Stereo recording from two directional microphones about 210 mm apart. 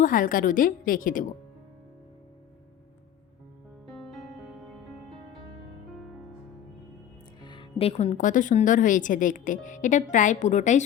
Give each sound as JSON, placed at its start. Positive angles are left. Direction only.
{"t": 0.0, "sound": "speech", "side_deg": 40}
{"t": 3.8, "sound": "music", "side_deg": 0}
{"t": 7.4, "sound": "speech", "side_deg": 25}